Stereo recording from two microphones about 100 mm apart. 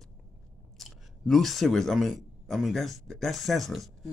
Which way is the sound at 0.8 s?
Centre (ahead or behind).